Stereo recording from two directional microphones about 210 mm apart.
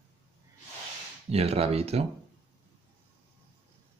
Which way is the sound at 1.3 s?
30° right (ahead or behind).